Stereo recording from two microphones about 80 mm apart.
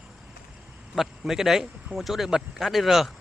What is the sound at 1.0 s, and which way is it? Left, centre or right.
Speech, centre.